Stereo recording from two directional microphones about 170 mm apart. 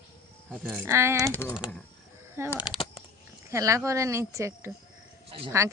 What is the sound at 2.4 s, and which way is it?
Speech, 15° right (ahead or behind).